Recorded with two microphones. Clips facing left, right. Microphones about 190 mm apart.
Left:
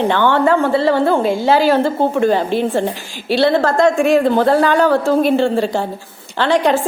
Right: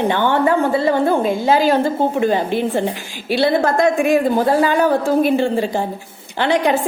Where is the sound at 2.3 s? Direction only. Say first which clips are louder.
Left 2 dB; 15° right (ahead or behind).